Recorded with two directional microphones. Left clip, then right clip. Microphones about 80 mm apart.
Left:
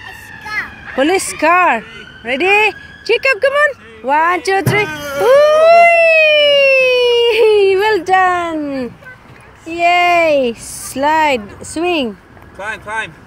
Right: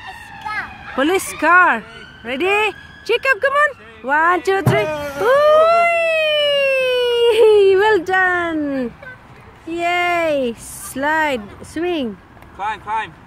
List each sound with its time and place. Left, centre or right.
0.6 s speech: right
5.2 s emergency vehicle: centre
8.6 s speech: right
9.7 s speech: centre